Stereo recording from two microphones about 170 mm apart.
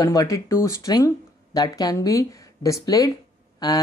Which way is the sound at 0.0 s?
20° left (ahead or behind).